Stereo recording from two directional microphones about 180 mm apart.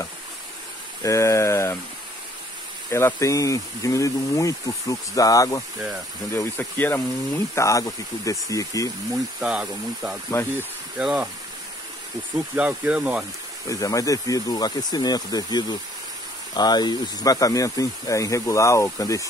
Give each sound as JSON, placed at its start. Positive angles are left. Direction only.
{"t": 1.0, "sound": "speech", "side_deg": 15}
{"t": 2.9, "sound": "speech", "side_deg": 15}
{"t": 6.6, "sound": "speech", "side_deg": 10}
{"t": 9.1, "sound": "speech", "side_deg": -5}
{"t": 12.5, "sound": "speech", "side_deg": -5}
{"t": 13.7, "sound": "speech", "side_deg": 20}